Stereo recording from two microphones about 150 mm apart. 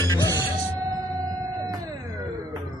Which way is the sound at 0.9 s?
25° right (ahead or behind).